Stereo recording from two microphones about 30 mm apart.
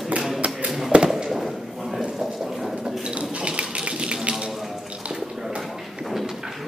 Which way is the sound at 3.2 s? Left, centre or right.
Right.